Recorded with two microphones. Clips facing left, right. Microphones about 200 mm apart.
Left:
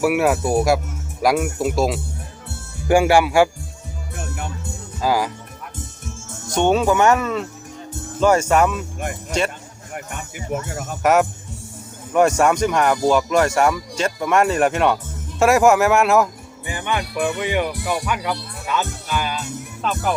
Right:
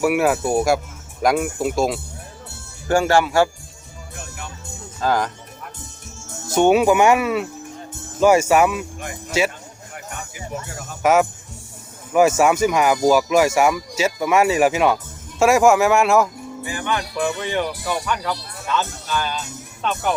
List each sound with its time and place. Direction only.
0.0 s speech: centre (ahead or behind)
2.8 s speech: 15° left (ahead or behind)
4.9 s speech: 10° left (ahead or behind)
6.5 s speech: 10° right (ahead or behind)
9.9 s music: 55° left (ahead or behind)
11.0 s speech: centre (ahead or behind)
16.6 s speech: 20° left (ahead or behind); by 20.1 s centre (ahead or behind)